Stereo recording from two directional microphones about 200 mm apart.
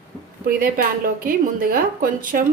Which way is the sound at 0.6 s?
45° right (ahead or behind).